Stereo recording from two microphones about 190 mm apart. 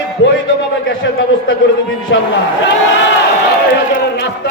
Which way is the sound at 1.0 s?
70° left (ahead or behind).